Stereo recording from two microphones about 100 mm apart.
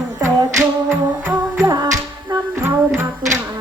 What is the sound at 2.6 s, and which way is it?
Music, 25° right (ahead or behind).